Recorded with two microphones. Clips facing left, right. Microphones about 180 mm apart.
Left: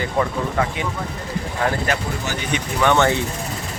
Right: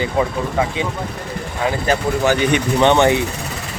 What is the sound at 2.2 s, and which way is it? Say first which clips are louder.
Speech: right 9 dB; 65° right (ahead or behind).